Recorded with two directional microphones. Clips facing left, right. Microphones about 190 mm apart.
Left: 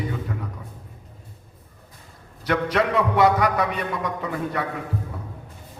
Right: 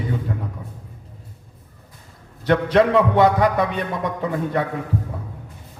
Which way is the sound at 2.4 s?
30° right (ahead or behind).